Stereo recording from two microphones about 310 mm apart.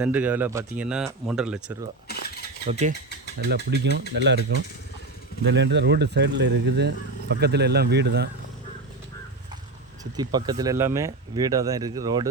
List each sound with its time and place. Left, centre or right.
0.0 s speech: centre
2.0 s cutlery: left
2.6 s speech: right
3.5 s speech: right
10.0 s speech: centre